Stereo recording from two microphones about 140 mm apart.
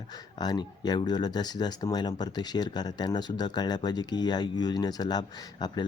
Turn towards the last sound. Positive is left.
turn(degrees=30)  # may be behind; listen again after turning